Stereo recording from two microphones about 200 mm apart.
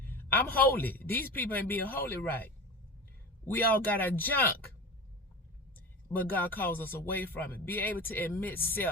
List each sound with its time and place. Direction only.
0.0 s a sound: 10° left (ahead or behind)
0.6 s speech: 10° left (ahead or behind)
6.1 s speech: 10° left (ahead or behind)